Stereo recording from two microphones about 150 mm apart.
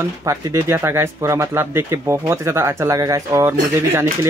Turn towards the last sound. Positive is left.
turn(degrees=-20)  # may be behind; listen again after turning